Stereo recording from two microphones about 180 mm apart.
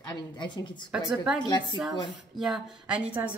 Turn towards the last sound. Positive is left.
turn(degrees=-5)  # may be behind; listen again after turning